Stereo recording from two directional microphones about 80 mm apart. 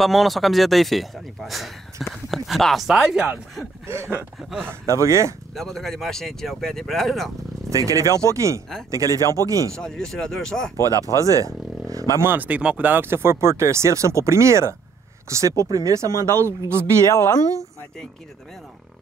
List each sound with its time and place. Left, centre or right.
0.0 s speech: centre
3.8 s speech: right
4.4 s speech: centre
4.6 s speech: right
5.5 s speech: centre
7.7 s speech: right
9.2 s speech: left
9.5 s speech: right
9.8 s speech: centre
11.1 s speech: right
12.3 s speech: centre
17.1 s speech: left